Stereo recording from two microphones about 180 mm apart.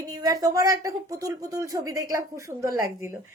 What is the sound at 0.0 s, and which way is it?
A woman's voice, 20° right (ahead or behind).